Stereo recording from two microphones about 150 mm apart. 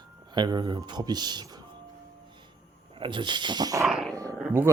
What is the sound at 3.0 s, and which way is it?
Speech, 30° right (ahead or behind).